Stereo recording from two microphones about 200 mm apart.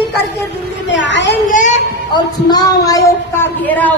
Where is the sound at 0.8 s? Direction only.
65° left (ahead or behind).